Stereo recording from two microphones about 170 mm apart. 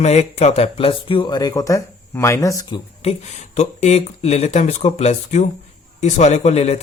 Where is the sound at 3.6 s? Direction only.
40° left (ahead or behind).